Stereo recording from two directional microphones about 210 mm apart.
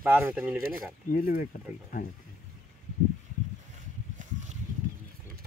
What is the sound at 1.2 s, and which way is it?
Speech, 40° left (ahead or behind).